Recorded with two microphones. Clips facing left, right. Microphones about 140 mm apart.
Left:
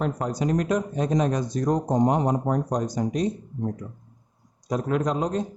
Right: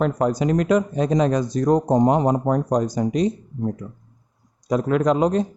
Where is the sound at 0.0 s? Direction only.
90° right.